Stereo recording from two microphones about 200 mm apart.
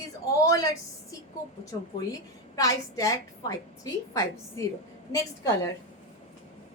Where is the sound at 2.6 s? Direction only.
15° left (ahead or behind).